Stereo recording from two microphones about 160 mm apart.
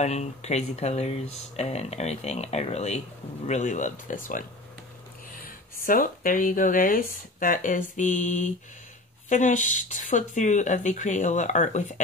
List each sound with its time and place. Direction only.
0.0 s speech: 45° left (ahead or behind)
5.9 s speech: 55° left (ahead or behind)